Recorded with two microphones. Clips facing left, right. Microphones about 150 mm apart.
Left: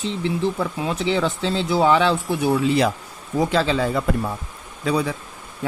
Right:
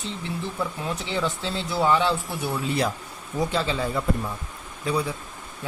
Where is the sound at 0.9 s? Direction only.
90° left.